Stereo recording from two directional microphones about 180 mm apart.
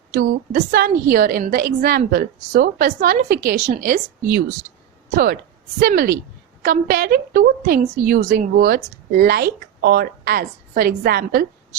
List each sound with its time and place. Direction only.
0.1 s a woman's voice: 55° right (ahead or behind)